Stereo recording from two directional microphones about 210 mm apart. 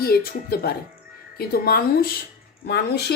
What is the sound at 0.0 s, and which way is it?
Speech, 45° left (ahead or behind).